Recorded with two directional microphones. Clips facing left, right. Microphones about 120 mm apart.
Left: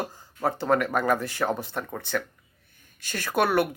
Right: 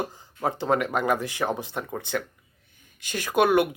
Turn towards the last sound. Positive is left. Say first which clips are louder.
# right 3 dB
turn(degrees=-15)  # may be behind; listen again after turning